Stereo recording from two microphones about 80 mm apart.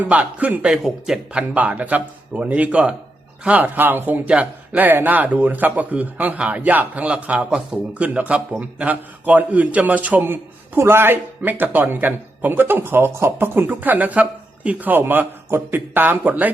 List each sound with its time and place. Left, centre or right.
0.0 s speech: centre
0.7 s speech: centre
10.8 s speech: right